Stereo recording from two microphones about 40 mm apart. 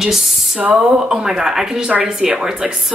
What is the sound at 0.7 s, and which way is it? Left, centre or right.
A woman's voice, centre.